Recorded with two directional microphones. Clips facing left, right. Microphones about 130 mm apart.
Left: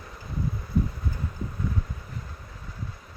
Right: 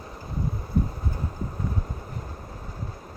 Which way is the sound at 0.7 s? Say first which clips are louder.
Even; 45° right (ahead or behind).